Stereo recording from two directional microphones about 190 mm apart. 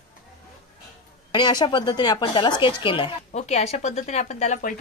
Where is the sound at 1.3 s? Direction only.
25° left (ahead or behind).